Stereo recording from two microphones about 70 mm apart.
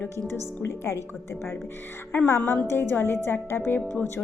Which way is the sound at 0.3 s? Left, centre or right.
Left.